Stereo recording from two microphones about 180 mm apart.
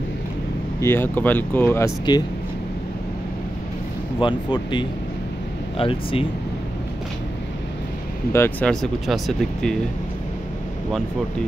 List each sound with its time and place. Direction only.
0.7 s speech: 15° left (ahead or behind)
2.1 s speech: 25° left (ahead or behind)
4.2 s speech: 25° left (ahead or behind)
8.3 s speech: 10° left (ahead or behind)
9.0 s speech: centre (ahead or behind)